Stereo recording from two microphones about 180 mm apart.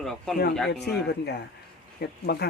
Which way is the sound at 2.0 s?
65° left (ahead or behind).